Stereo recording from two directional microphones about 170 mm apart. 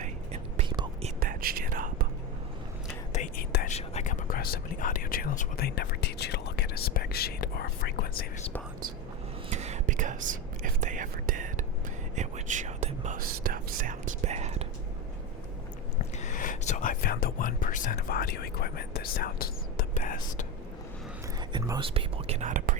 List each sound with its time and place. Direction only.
1.2 s whispering: 60° right (ahead or behind)
3.3 s whispering: 60° left (ahead or behind)
3.7 s whispering: 40° left (ahead or behind); by 8.3 s 65° left (ahead or behind)
9.5 s whispering: 40° right (ahead or behind)
16.1 s whispering: 50° left (ahead or behind)
21.5 s whispering: 30° right (ahead or behind); by 22.8 s 50° right (ahead or behind)